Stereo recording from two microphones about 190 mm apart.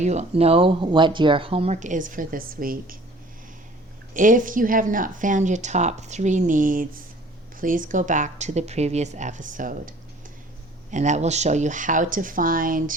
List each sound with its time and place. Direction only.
0.0 s speech: 35° right (ahead or behind)
4.1 s speech: 45° right (ahead or behind)
10.9 s speech: 40° right (ahead or behind)